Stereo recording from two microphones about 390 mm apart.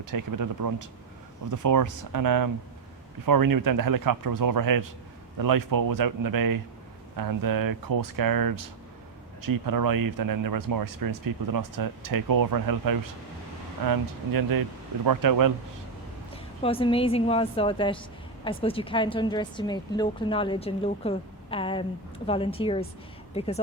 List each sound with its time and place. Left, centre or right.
0.0 s speech: right
16.3 s a woman's voice: centre